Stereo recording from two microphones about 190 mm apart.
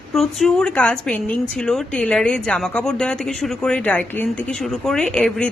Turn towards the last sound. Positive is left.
turn(degrees=5)  # may be behind; listen again after turning